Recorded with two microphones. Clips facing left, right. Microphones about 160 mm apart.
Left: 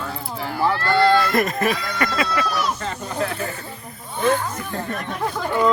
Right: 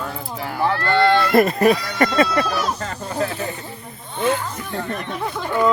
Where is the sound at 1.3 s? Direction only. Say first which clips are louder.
Right 6 dB; 30° right (ahead or behind).